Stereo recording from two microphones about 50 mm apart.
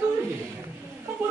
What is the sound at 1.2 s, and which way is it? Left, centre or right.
Music, right.